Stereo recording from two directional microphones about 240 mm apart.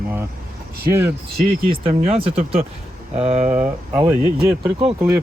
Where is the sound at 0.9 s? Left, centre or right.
Centre.